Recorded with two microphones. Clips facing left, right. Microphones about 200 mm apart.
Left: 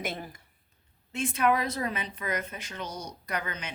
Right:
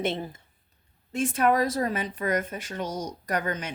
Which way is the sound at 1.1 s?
45° right (ahead or behind).